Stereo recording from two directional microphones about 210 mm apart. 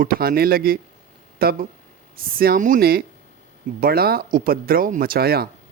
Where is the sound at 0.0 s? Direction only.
45° right (ahead or behind).